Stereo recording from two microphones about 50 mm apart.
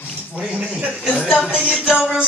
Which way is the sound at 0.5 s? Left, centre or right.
Centre.